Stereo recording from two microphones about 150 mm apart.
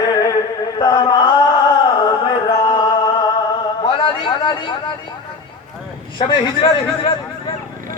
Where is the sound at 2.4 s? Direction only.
35° left (ahead or behind).